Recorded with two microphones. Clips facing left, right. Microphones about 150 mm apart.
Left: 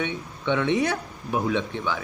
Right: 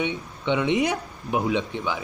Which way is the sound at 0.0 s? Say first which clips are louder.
Right 1 dB; 15° right (ahead or behind).